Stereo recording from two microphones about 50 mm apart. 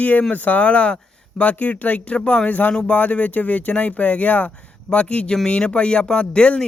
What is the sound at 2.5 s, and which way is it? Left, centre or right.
Speech, left.